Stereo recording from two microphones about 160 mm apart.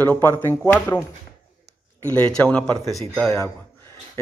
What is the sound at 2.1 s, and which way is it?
Speech, 10° left (ahead or behind).